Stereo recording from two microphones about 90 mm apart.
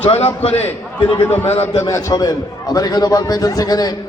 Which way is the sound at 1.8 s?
40° left (ahead or behind).